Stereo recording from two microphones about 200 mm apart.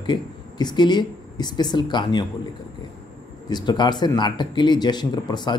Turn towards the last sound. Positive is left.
turn(degrees=20)  # may be behind; listen again after turning